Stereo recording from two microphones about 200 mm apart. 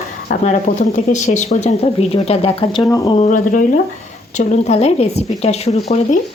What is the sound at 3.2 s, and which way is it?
Speech, 40° left (ahead or behind).